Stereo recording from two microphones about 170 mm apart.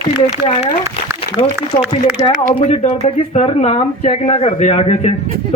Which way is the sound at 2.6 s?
35° left (ahead or behind).